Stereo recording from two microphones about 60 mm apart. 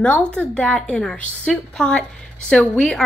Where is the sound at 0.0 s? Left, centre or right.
Left.